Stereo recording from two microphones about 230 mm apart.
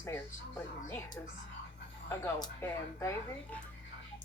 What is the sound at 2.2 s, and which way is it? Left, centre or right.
Speech, centre.